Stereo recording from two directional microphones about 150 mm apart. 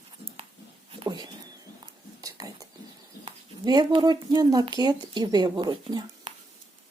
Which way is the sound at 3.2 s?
30° right (ahead or behind).